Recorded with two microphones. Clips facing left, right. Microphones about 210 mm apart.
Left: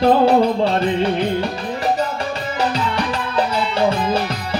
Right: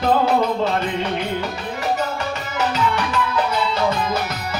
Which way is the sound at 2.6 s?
30° left (ahead or behind).